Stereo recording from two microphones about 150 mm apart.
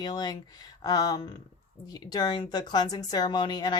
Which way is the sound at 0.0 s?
30° left (ahead or behind).